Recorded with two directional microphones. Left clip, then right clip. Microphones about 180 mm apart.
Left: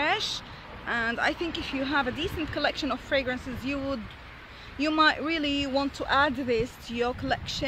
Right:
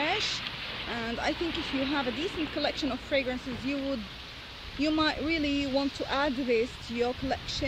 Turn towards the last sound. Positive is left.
turn(degrees=35)  # may be behind; listen again after turning